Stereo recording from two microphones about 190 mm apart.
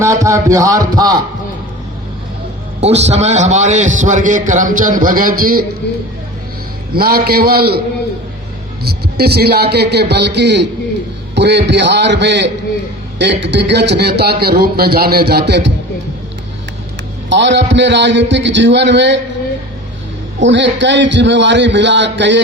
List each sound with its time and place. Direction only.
0.0 s a sound: 15° right (ahead or behind)
2.8 s a man's voice: 35° right (ahead or behind)
6.9 s a man's voice: 50° right (ahead or behind)
8.8 s a man's voice: 55° right (ahead or behind)
17.2 s a man's voice: 70° right (ahead or behind)
20.4 s a man's voice: 75° right (ahead or behind)